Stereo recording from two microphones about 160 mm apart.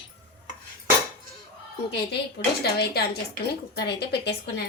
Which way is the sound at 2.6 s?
80° left.